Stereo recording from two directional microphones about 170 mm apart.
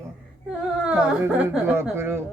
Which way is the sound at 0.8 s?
10° right (ahead or behind).